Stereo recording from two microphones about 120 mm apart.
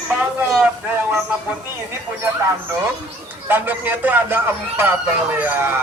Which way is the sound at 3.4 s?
15° right (ahead or behind).